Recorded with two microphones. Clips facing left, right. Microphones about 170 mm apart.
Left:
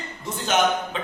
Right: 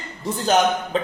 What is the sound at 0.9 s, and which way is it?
Music, 40° right (ahead or behind).